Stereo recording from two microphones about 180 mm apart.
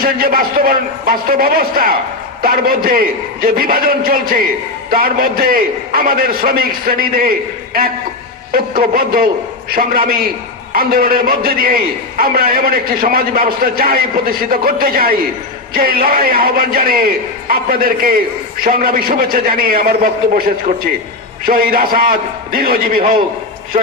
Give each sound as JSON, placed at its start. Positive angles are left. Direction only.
{"t": 0.0, "sound": "a man's voice", "side_deg": -55}
{"t": 21.4, "sound": "a man's voice", "side_deg": -55}